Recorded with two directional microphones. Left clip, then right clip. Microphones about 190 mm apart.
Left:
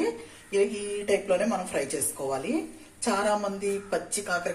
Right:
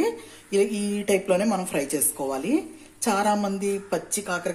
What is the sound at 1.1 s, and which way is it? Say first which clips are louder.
Speech: right 3 dB; 55° right (ahead or behind).